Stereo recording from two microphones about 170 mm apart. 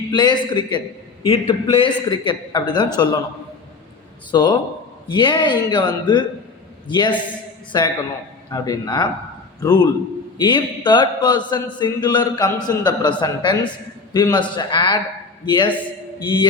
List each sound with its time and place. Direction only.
0.1 s a man's voice: 25° left (ahead or behind)
4.3 s a man's voice: 25° left (ahead or behind)